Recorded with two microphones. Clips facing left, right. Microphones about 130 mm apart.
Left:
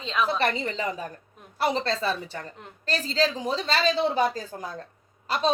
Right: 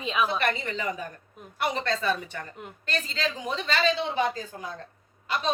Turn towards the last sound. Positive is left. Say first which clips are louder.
# left 2 dB
turn(degrees=35)  # may be behind; listen again after turning